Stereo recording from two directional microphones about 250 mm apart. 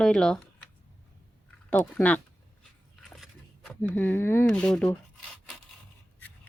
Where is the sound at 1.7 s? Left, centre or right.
Centre.